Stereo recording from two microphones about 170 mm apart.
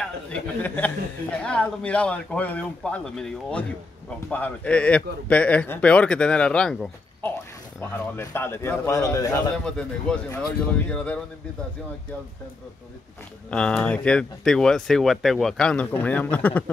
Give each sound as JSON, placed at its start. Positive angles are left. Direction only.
{"t": 0.0, "sound": "a man's voice", "side_deg": 10}
{"t": 10.1, "sound": "speech", "side_deg": 5}
{"t": 13.5, "sound": "speech", "side_deg": 5}